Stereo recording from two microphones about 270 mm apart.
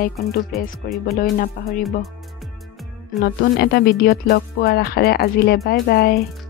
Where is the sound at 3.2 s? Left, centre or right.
Left.